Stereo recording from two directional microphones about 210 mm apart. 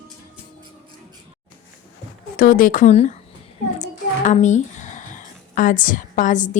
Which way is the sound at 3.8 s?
35° left (ahead or behind).